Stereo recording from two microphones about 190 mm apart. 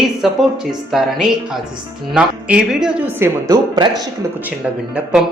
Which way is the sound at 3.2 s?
20° right (ahead or behind).